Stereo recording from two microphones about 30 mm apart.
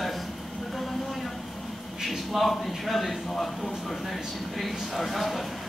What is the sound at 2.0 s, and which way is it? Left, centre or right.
A man's voice, centre.